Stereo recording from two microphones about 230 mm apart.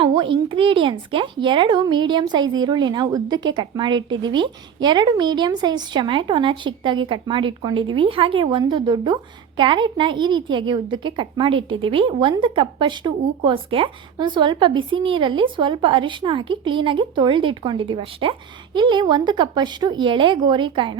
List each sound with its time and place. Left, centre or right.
0.0 s a woman's voice: right